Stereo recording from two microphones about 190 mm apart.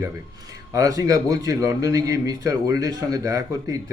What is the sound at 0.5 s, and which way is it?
A man's voice, 20° right (ahead or behind).